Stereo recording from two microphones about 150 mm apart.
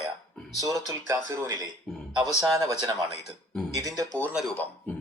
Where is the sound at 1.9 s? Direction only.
Centre (ahead or behind).